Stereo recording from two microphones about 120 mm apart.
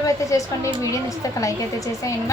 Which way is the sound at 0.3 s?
25° left (ahead or behind).